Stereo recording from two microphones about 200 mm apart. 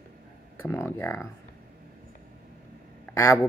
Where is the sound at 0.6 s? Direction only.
10° left (ahead or behind).